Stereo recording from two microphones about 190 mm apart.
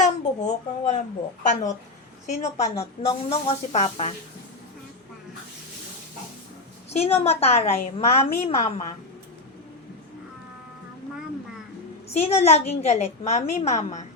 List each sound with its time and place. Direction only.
0.0 s speech: 40° left (ahead or behind)
2.2 s a woman's voice: 35° left (ahead or behind)
6.9 s a woman's voice: 35° left (ahead or behind)
12.0 s a woman's voice: 35° left (ahead or behind)